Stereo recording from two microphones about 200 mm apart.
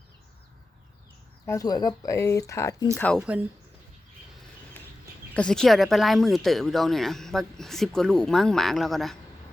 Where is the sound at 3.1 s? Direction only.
5° right (ahead or behind).